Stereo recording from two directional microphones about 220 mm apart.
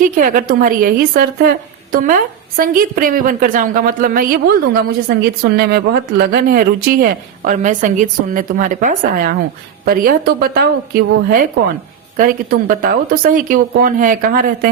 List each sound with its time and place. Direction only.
0.2 s a woman's voice: 40° right (ahead or behind)